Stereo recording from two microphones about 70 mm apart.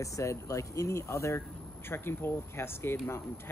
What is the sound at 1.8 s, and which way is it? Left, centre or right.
Speech, left.